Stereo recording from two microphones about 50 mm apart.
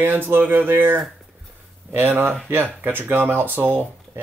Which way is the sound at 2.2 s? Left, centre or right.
Right.